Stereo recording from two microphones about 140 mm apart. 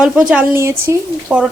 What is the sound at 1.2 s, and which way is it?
Frying, 5° right (ahead or behind).